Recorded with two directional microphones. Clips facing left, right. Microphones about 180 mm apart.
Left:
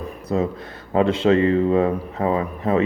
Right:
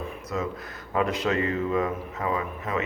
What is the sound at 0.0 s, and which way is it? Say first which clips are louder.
Speech: left 7 dB; 35° left (ahead or behind).